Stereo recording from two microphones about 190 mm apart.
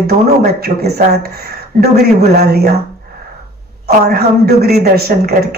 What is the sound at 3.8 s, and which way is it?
Speech, 55° right (ahead or behind).